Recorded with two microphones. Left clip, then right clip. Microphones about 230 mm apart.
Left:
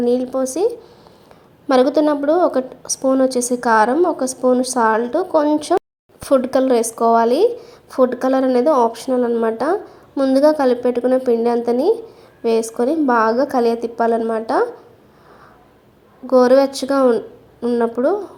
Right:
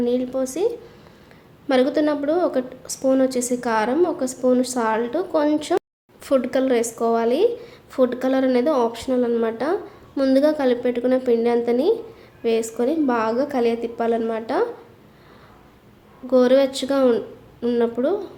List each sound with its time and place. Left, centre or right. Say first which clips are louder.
0.0 s a woman's voice: left 4 dB; centre
16.2 s a woman's voice: left 4 dB; centre